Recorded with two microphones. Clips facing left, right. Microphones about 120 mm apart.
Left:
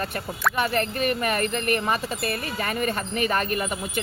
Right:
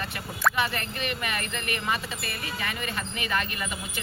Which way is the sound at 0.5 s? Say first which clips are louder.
Left 5 dB; 45° left (ahead or behind).